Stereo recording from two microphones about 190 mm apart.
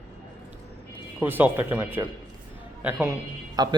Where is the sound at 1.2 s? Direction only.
10° right (ahead or behind).